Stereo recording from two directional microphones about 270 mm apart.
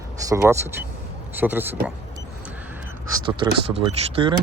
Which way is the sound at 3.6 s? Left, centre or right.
Centre.